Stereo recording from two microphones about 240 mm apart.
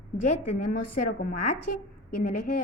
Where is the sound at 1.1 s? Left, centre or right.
Left.